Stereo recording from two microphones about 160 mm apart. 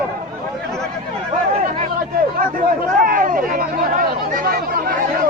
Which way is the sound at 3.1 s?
60° right (ahead or behind).